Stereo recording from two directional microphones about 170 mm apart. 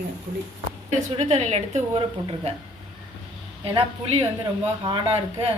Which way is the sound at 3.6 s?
35° right (ahead or behind).